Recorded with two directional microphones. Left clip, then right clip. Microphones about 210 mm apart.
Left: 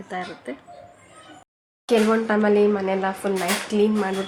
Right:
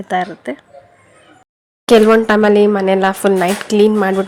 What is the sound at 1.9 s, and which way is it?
A woman's voice, 40° right (ahead or behind).